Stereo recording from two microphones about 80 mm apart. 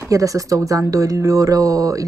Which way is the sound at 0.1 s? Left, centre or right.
Right.